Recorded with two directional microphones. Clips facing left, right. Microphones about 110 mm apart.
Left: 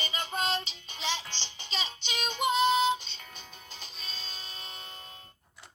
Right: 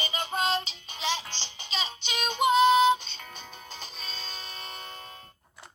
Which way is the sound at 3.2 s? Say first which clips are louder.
Right 5 dB; 85° right.